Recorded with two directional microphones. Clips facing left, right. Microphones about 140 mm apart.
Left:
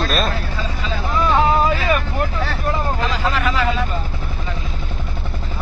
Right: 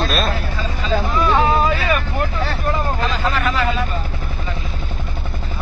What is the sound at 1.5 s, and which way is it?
Vehicle, 20° left (ahead or behind).